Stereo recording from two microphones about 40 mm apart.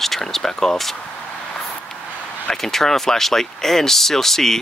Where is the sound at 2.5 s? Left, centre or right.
Centre.